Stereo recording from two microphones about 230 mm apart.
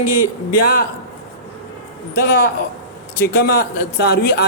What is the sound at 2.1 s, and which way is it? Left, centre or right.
A man's voice, left.